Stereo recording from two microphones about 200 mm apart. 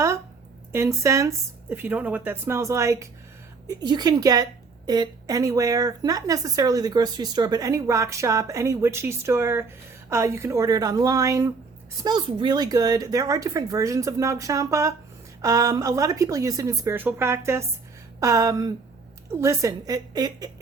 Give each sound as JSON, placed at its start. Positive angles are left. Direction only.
{"t": 0.7, "sound": "a woman's voice", "side_deg": -15}